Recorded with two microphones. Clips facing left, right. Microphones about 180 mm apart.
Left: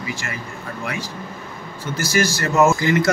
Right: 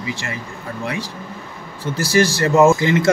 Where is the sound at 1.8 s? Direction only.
30° right (ahead or behind).